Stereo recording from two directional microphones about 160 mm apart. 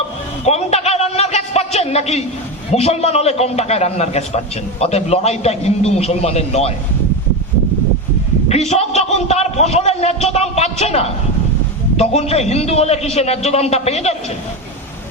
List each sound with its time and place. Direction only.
0.4 s a sound: 40° left (ahead or behind)
2.7 s a man's voice: 40° left (ahead or behind)
8.4 s a man's voice: 40° left (ahead or behind)